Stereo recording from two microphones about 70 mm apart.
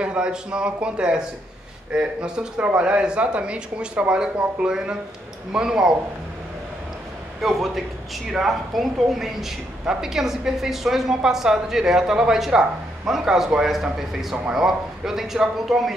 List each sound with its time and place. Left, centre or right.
0.0 s speech: centre
7.4 s a woman's voice: centre